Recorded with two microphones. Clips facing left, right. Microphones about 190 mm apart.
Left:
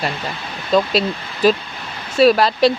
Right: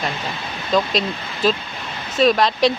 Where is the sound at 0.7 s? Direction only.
5° left (ahead or behind).